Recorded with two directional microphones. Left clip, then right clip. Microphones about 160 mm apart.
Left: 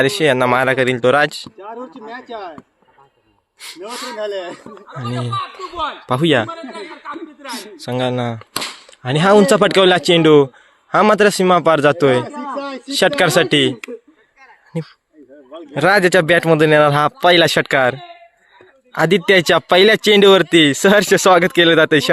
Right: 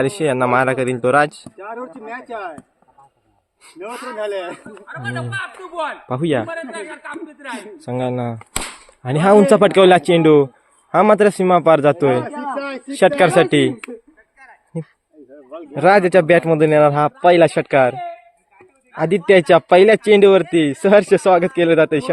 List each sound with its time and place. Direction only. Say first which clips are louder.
0.0 s speech: left 3 dB; centre (ahead or behind)
1.5 s speech: right 1 dB; 35° left (ahead or behind)
3.6 s speech: left 2 dB; centre (ahead or behind)
4.2 s speech: right 1 dB; 40° left (ahead or behind)
4.7 s speech: even; 10° left (ahead or behind)
7.4 s speech: left 2 dB; centre (ahead or behind)
12.5 s a sound: even; 55° left (ahead or behind)
12.9 s speech: right 1 dB; centre (ahead or behind)
15.7 s speech: even; 5° left (ahead or behind)
18.9 s speech: left 1 dB; 15° left (ahead or behind)